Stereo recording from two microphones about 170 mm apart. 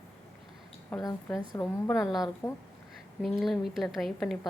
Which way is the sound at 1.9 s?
Centre (ahead or behind).